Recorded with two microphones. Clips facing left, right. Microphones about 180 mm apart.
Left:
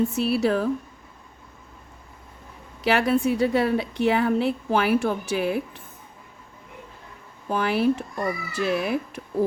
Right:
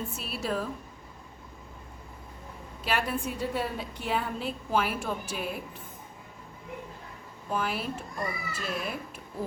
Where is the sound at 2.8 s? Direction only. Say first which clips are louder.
Left 10 dB; 75° left (ahead or behind).